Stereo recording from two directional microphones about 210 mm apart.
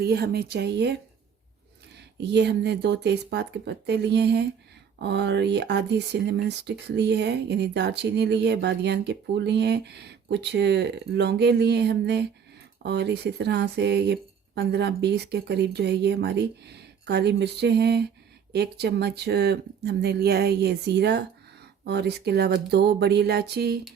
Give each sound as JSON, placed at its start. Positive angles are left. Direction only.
{"t": 0.0, "sound": "speech", "side_deg": -50}
{"t": 2.2, "sound": "speech", "side_deg": -55}